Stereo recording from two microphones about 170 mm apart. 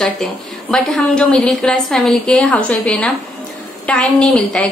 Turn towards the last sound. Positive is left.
turn(degrees=5)  # may be behind; listen again after turning